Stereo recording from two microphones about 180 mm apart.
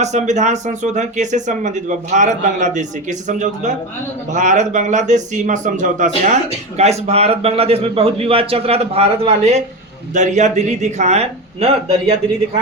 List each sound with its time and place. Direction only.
0.0 s speech: 40° right (ahead or behind)